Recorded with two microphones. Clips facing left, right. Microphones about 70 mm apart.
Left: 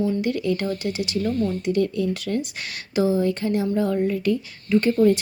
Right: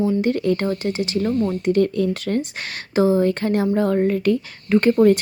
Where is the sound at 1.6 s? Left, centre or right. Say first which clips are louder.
Right 5 dB; right.